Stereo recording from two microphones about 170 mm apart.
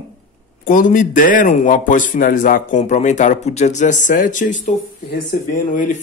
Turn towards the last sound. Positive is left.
turn(degrees=50)  # may be behind; listen again after turning